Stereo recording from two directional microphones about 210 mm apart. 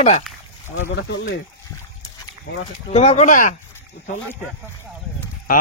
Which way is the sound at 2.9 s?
30° left (ahead or behind).